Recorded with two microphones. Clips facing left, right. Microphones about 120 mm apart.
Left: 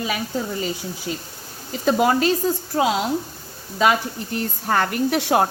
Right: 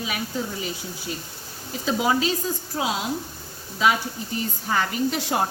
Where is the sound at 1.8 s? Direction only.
55° left (ahead or behind).